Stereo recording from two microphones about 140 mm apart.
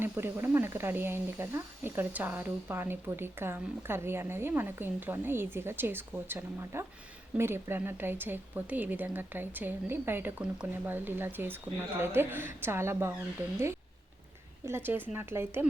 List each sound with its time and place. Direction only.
0.0 s speech: 15° right (ahead or behind)
14.6 s speech: 15° right (ahead or behind)